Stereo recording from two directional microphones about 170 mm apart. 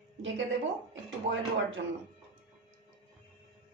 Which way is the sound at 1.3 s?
90° right.